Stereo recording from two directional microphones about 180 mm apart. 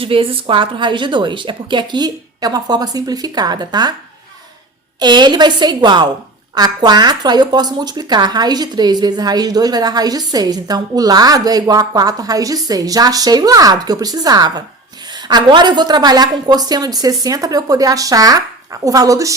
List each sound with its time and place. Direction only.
0.0 s a woman's voice: 30° right (ahead or behind)
4.9 s a woman's voice: 25° right (ahead or behind)